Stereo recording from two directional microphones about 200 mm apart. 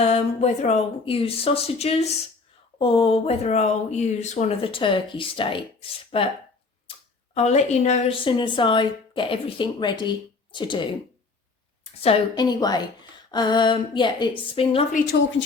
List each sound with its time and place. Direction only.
0.0 s a woman's voice: 35° left (ahead or behind)
7.3 s a woman's voice: 35° left (ahead or behind)
12.0 s a woman's voice: 25° left (ahead or behind)